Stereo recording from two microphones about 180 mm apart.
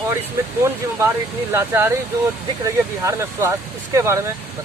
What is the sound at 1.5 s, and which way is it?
Speech, 15° right (ahead or behind).